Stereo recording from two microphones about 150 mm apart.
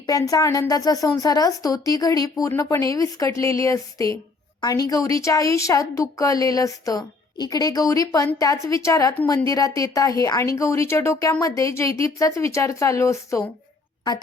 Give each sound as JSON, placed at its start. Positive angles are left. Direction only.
{"t": 0.0, "sound": "a woman's voice", "side_deg": 25}